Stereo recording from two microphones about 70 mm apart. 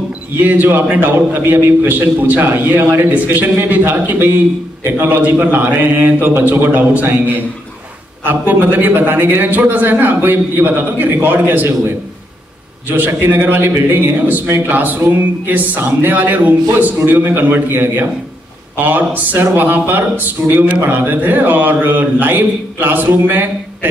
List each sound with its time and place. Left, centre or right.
0.4 s a man's voice: right
8.2 s a man's voice: right
12.8 s a man's voice: right